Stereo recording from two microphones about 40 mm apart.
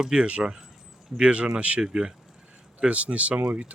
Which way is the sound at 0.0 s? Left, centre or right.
Right.